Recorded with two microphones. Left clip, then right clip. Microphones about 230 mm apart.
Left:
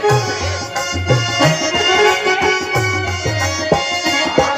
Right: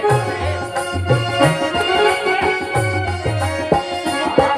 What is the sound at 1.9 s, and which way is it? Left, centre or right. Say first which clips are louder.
Music: left 3 dB; left.